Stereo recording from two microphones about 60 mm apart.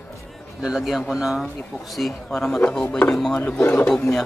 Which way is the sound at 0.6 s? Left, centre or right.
Centre.